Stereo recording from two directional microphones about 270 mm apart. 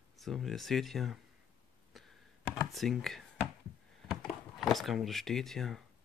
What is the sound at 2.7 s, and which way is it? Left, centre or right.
Speech, centre.